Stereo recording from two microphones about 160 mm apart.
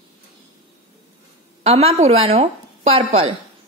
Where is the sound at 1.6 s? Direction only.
40° right (ahead or behind).